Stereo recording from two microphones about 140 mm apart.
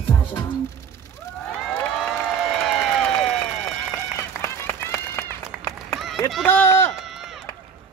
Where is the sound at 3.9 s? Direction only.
20° left (ahead or behind).